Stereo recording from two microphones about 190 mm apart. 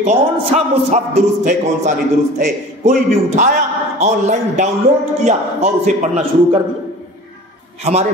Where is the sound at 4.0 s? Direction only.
40° right (ahead or behind).